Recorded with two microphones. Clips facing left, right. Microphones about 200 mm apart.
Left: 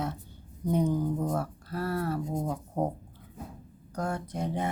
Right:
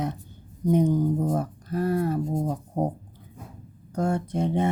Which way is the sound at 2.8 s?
20° right (ahead or behind).